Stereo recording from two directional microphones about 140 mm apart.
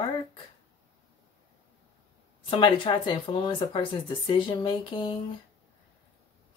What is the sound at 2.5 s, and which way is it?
Speech, 40° left (ahead or behind).